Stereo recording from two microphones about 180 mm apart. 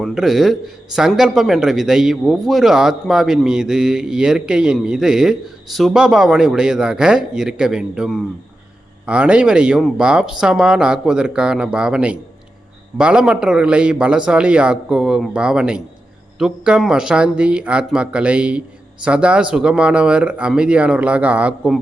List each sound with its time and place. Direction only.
0.0 s a man's voice: centre (ahead or behind)